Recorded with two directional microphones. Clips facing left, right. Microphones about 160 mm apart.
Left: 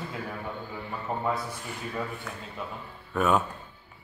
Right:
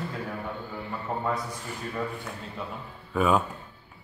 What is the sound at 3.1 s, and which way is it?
Speech, centre (ahead or behind).